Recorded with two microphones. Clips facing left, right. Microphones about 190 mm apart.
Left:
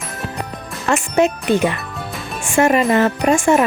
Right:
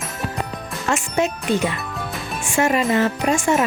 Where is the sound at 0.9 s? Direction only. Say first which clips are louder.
Left 5 dB; 60° left (ahead or behind).